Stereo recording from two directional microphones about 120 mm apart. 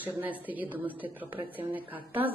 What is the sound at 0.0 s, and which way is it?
A woman's voice, 15° right (ahead or behind).